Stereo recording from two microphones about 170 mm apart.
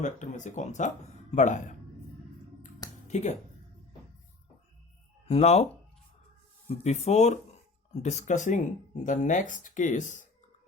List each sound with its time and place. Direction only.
0.0 s speech: 45° left (ahead or behind)
3.1 s speech: 45° left (ahead or behind)
5.3 s speech: 40° left (ahead or behind)
6.7 s speech: 40° left (ahead or behind)